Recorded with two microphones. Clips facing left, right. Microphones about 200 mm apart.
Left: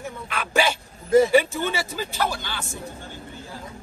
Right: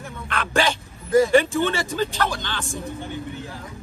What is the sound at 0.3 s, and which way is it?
Speech, 5° left (ahead or behind).